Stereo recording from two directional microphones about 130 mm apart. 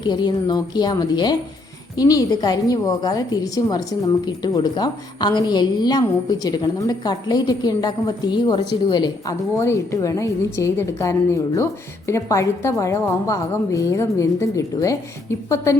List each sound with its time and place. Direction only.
0.0 s a woman's voice: 35° left (ahead or behind)
9.6 s a woman's voice: 20° left (ahead or behind)